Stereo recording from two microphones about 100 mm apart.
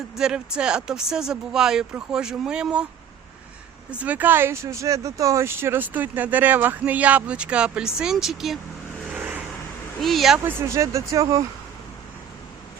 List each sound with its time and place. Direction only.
0.2 s speech: 10° right (ahead or behind)
3.9 s speech: 15° right (ahead or behind)
9.1 s vehicle: 15° right (ahead or behind)
10.0 s speech: centre (ahead or behind)
10.4 s speech: 30° right (ahead or behind)